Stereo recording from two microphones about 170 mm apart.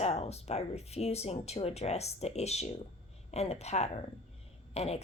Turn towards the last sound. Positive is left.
turn(degrees=40)  # may be behind; listen again after turning